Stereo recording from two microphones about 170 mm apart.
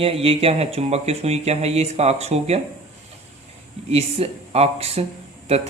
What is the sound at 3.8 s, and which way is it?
Speech, 40° right (ahead or behind).